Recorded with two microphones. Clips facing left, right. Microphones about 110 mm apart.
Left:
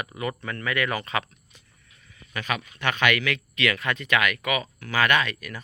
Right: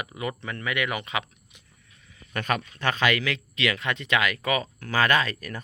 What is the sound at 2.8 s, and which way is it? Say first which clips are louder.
Speech: left 2 dB; 30° right (ahead or behind).